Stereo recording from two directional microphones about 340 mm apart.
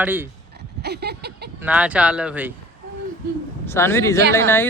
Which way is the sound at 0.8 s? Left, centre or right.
Right.